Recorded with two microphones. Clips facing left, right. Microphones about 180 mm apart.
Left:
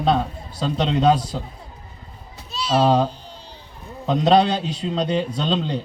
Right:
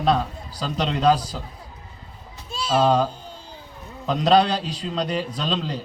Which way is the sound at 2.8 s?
25° left (ahead or behind).